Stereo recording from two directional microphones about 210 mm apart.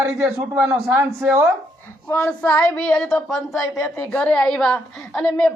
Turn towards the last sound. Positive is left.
turn(degrees=5)  # may be behind; listen again after turning